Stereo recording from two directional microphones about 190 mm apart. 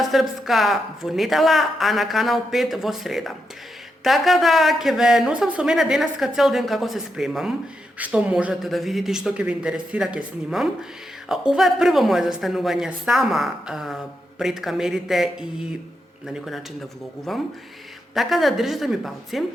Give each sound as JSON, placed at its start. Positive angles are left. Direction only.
{"t": 0.0, "sound": "a woman's voice", "side_deg": 0}